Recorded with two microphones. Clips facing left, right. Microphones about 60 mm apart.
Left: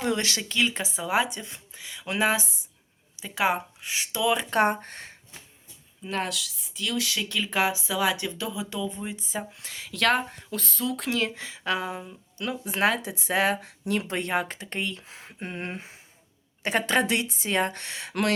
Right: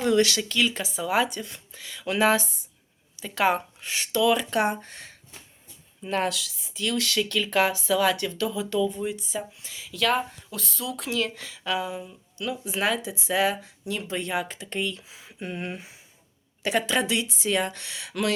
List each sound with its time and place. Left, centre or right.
0.0 s speech: left; by 4.2 s centre
4.2 s speech: left
4.5 s speech: left
6.0 s speech: centre; by 9.5 s left
9.5 s speech: left
11.3 s speech: left
11.7 s speech: left
15.1 s speech: left
18.1 s speech: left